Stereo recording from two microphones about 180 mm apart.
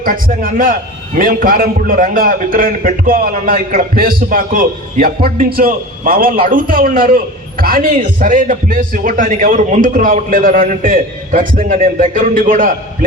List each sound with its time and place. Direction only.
0.0 s a man's voice: 50° right (ahead or behind)